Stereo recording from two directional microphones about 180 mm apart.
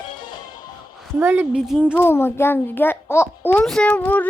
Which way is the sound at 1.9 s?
10° left (ahead or behind).